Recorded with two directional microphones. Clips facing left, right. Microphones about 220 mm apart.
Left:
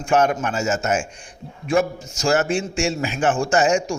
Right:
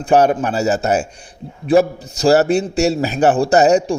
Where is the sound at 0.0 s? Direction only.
35° right (ahead or behind).